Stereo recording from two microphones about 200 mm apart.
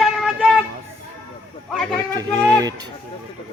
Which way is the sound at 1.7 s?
Centre (ahead or behind).